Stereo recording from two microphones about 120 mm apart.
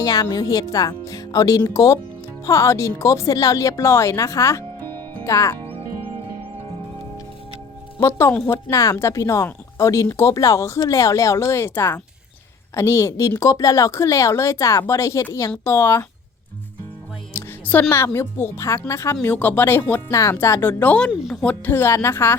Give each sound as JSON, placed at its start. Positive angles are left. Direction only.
{"t": 0.0, "sound": "speech", "side_deg": 30}
{"t": 7.9, "sound": "speech", "side_deg": 25}
{"t": 17.3, "sound": "a woman's voice", "side_deg": 15}
{"t": 21.1, "sound": "speech", "side_deg": -5}
{"t": 21.4, "sound": "speech", "side_deg": 15}